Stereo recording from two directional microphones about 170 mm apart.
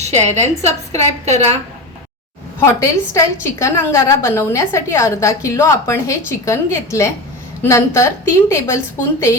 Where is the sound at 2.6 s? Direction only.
15° left (ahead or behind).